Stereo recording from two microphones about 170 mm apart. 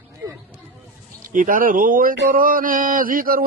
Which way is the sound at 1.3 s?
55° right (ahead or behind).